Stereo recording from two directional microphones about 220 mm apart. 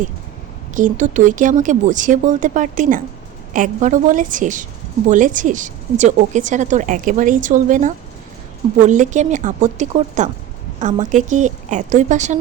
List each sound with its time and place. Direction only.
0.7 s a woman's voice: 35° right (ahead or behind)